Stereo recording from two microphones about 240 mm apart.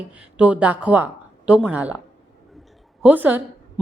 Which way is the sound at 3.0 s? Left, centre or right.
Centre.